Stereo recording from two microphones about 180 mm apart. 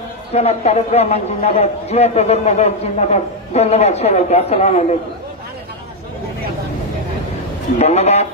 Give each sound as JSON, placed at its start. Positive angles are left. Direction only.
{"t": 0.3, "sound": "a man's voice", "side_deg": 35}
{"t": 7.8, "sound": "a man's voice", "side_deg": 40}